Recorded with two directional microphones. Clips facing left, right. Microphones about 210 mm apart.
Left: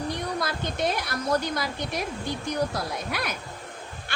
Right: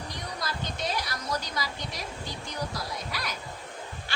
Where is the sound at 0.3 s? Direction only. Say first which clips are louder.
Left 6 dB; 55° left (ahead or behind).